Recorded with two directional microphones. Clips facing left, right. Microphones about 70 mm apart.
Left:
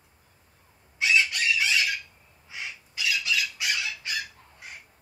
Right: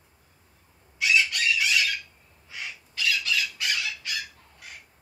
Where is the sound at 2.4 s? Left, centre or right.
Centre.